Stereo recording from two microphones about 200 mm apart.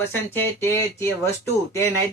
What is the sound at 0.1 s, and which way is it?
Speech, 10° left (ahead or behind).